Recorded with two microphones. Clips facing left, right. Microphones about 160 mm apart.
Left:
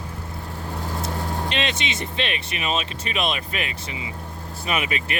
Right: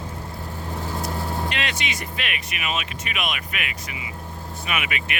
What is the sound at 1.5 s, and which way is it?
Speech, 25° left (ahead or behind).